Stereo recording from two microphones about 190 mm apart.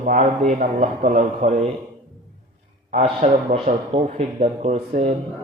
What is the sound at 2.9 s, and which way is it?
A man's voice, 35° right (ahead or behind).